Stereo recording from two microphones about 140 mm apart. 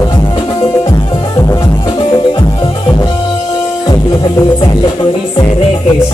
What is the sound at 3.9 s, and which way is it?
Music, 30° left (ahead or behind).